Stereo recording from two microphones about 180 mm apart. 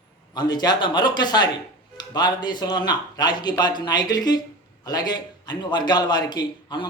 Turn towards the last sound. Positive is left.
turn(degrees=25)  # may be behind; listen again after turning